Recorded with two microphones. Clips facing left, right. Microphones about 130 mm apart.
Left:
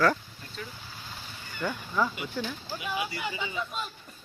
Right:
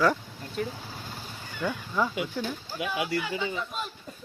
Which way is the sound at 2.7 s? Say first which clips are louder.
Right 4 dB; 85° right.